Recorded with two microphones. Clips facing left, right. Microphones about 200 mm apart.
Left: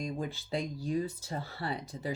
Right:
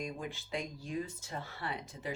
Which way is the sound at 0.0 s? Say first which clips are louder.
Left 4 dB; 35° left (ahead or behind).